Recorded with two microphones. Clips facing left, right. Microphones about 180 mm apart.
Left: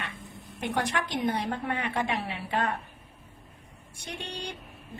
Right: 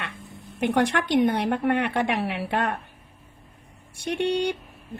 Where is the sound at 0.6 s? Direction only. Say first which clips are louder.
Right 7 dB; 70° right (ahead or behind).